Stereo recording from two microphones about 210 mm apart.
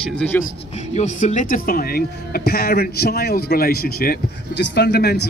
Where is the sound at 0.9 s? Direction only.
35° left (ahead or behind).